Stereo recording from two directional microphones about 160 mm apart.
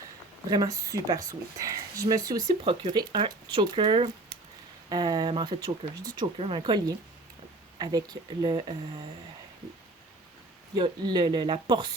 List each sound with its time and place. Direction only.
0.4 s speech: 25° right (ahead or behind)
10.8 s speech: 30° right (ahead or behind)